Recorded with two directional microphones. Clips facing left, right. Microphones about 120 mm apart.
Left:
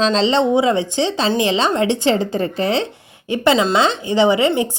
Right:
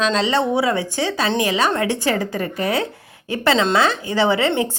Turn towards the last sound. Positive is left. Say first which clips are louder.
# left 3 dB
turn(degrees=15)  # may be behind; listen again after turning